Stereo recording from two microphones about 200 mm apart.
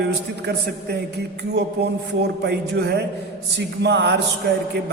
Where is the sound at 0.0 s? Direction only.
55° right (ahead or behind).